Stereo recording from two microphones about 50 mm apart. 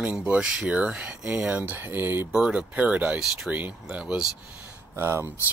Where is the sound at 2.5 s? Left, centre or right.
Right.